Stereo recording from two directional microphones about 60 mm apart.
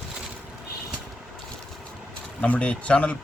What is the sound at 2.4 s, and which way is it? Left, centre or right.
Speech, left.